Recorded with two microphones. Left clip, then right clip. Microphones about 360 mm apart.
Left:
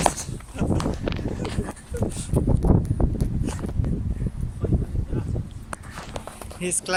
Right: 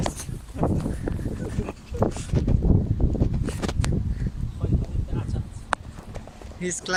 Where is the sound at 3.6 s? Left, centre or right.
Right.